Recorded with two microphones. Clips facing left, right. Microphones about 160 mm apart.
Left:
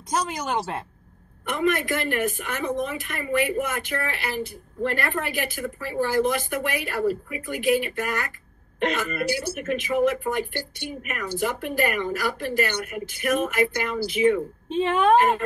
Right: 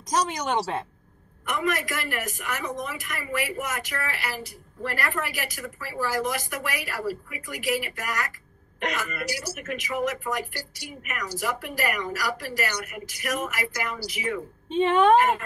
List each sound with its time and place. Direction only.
0.1 s speech: 5° left (ahead or behind)
1.5 s speech: 30° left (ahead or behind)
14.8 s speech: centre (ahead or behind)